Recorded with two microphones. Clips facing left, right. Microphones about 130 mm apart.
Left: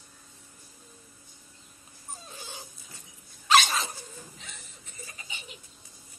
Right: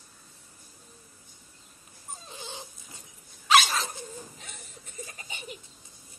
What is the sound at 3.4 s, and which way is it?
Dog, 5° right (ahead or behind).